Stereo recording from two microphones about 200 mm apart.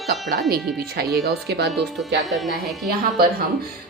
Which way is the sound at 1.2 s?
55° right (ahead or behind).